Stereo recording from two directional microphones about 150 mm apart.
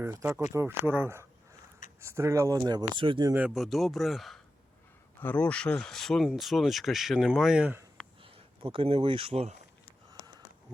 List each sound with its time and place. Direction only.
0.0 s speech: 15° right (ahead or behind)
3.3 s speech: 5° right (ahead or behind)
8.2 s speech: 35° right (ahead or behind)